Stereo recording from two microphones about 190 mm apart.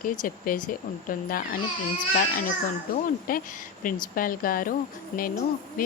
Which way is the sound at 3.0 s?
45° left (ahead or behind).